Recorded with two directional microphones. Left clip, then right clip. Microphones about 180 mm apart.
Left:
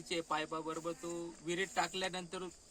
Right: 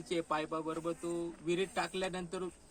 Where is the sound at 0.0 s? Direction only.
10° left (ahead or behind).